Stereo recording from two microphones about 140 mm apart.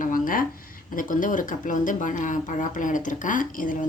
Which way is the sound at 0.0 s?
80° left.